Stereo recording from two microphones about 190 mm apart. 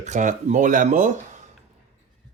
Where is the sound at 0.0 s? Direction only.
40° right (ahead or behind).